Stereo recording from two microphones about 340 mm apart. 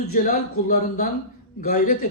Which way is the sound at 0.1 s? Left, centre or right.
Left.